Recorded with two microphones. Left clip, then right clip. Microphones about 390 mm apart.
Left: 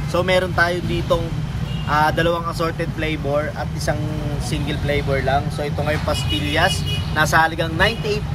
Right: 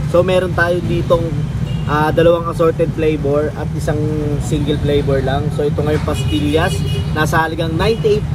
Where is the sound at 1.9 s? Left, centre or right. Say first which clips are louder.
Right 5 dB; left.